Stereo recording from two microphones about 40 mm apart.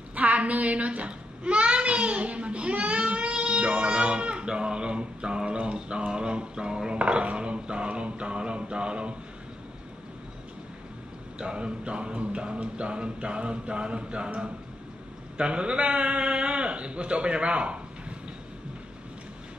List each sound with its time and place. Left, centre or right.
0.1 s a sound: right
7.0 s music: right
11.3 s music: right
15.3 s a man's voice: right